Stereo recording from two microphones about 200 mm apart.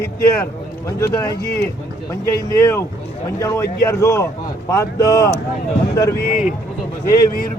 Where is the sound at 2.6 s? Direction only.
15° left (ahead or behind).